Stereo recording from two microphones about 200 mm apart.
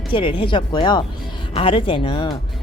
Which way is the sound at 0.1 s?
25° left (ahead or behind).